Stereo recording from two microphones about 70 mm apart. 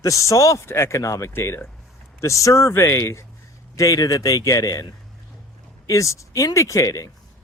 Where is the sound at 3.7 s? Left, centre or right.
Left.